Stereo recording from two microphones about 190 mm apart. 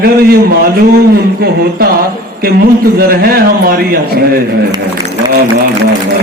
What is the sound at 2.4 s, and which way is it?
A man's voice, 50° right (ahead or behind).